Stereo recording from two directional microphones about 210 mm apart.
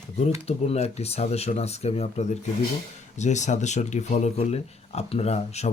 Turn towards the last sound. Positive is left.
turn(degrees=30)  # may be behind; listen again after turning